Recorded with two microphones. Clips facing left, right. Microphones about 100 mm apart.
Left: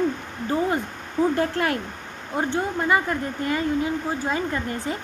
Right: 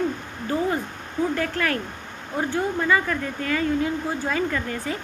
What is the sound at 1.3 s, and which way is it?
Speech, 25° left (ahead or behind).